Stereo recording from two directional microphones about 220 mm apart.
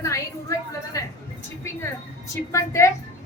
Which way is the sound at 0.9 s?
15° left (ahead or behind).